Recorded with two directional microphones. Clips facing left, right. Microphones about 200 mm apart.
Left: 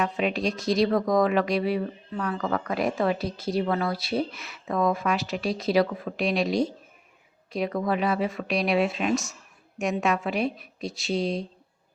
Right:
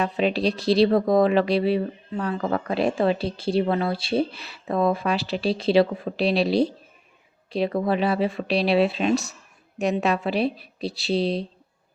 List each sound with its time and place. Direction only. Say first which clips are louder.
0.0 s speech: right 3 dB; 35° right (ahead or behind)